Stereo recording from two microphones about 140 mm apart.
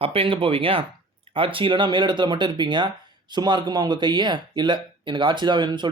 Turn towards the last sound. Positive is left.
turn(degrees=-35)  # may be behind; listen again after turning